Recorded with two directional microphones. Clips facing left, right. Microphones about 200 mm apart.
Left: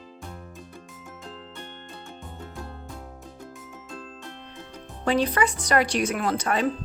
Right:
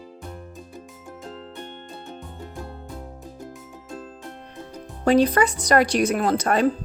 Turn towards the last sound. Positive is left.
turn(degrees=-40)  # may be behind; listen again after turning